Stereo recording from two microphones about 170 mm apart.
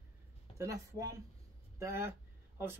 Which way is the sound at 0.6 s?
20° right (ahead or behind).